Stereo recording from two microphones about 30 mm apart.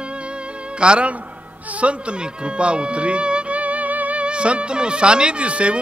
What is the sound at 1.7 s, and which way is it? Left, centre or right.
Speech, right.